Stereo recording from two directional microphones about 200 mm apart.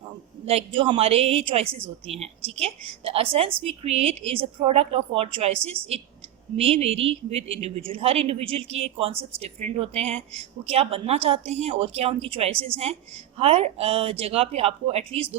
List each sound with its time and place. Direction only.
0.4 s a woman's voice: 30° right (ahead or behind)